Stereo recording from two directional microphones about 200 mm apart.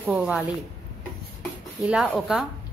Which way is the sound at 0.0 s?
5° right (ahead or behind).